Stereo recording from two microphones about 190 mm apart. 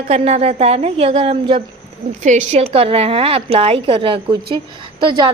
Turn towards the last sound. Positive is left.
turn(degrees=-25)  # may be behind; listen again after turning